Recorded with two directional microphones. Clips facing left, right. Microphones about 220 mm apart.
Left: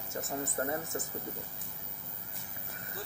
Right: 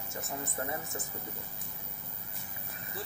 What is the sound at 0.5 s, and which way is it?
Speech, 45° left (ahead or behind).